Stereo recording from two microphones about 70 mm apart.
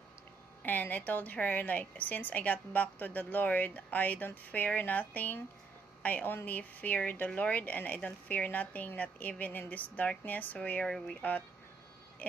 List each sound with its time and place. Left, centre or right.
0.6 s a woman's voice: left